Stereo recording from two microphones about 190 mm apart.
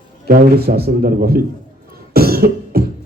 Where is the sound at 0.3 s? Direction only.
55° right (ahead or behind).